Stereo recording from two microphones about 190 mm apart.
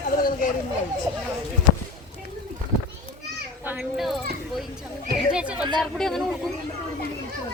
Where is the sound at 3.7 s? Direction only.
Centre (ahead or behind).